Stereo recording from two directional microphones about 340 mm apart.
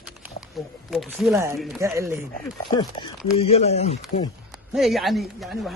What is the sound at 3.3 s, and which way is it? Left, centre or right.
Speech, centre.